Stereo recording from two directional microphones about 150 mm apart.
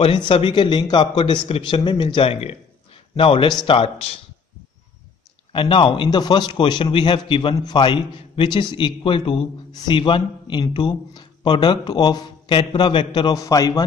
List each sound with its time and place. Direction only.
0.3 s a man's voice: 35° left (ahead or behind)
5.5 s a man's voice: 35° left (ahead or behind)